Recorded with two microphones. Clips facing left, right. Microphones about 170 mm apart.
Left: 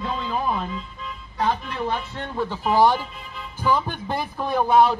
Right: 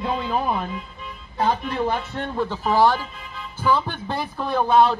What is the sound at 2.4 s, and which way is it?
A man's voice, 10° left (ahead or behind).